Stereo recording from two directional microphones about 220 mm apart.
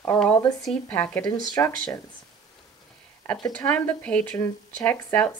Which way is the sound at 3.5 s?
5° left (ahead or behind).